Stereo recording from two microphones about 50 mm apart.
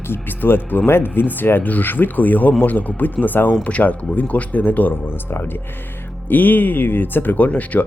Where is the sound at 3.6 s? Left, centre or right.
Left.